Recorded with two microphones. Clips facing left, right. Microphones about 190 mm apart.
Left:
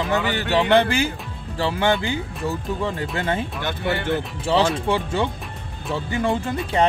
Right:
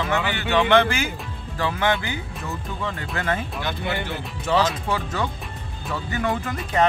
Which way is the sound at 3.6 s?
50° left (ahead or behind).